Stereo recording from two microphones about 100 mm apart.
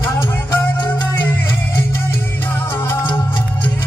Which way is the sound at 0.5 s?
45° left (ahead or behind).